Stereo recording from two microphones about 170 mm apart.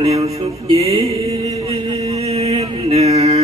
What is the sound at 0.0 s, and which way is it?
Mantra, 35° right (ahead or behind).